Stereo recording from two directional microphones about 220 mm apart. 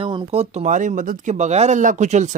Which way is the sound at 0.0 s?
20° right (ahead or behind).